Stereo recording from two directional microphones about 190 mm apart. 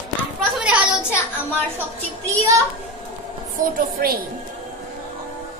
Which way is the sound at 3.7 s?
50° right (ahead or behind).